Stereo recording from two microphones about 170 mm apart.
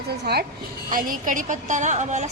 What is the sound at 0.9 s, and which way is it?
A woman's voice, 50° right (ahead or behind).